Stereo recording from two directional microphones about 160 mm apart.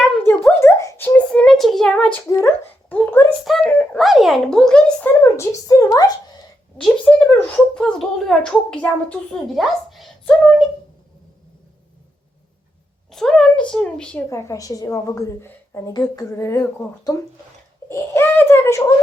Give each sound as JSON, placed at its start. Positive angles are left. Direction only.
{"t": 0.6, "sound": "a sound", "side_deg": 20}
{"t": 2.3, "sound": "dog", "side_deg": 15}
{"t": 3.4, "sound": "a sound", "side_deg": 5}
{"t": 6.8, "sound": "speech", "side_deg": 10}
{"t": 13.1, "sound": "speech", "side_deg": 5}
{"t": 14.3, "sound": "a woman's voice", "side_deg": 20}